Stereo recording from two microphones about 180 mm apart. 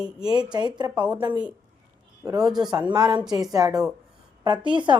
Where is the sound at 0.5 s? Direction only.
25° right (ahead or behind).